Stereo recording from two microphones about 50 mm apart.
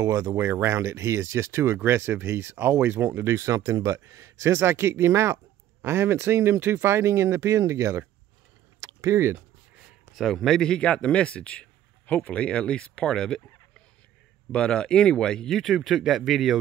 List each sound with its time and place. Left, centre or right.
0.0 s speech: right
3.3 s speech: right
5.9 s speech: right
9.0 s speech: right
10.1 s speech: centre
14.5 s speech: centre
15.5 s speech: centre